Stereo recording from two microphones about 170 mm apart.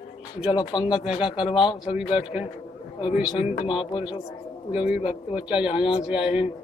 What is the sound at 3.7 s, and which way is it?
Speech, 30° left (ahead or behind).